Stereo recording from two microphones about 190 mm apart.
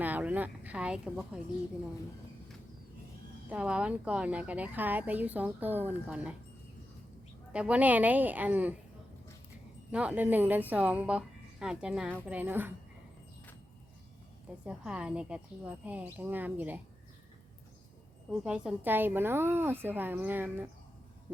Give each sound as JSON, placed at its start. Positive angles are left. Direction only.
{"t": 0.0, "sound": "speech", "side_deg": -10}
{"t": 3.5, "sound": "speech", "side_deg": -5}
{"t": 7.5, "sound": "speech", "side_deg": -5}
{"t": 9.9, "sound": "speech", "side_deg": -5}
{"t": 14.6, "sound": "speech", "side_deg": -5}
{"t": 18.3, "sound": "speech", "side_deg": -5}